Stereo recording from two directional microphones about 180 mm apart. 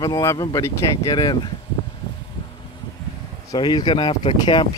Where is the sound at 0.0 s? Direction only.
20° left (ahead or behind).